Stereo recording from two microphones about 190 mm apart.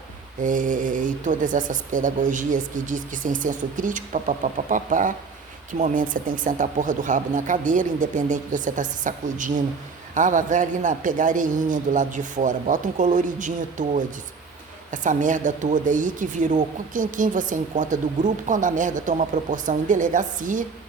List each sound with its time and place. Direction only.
0.4 s speech: 45° right (ahead or behind)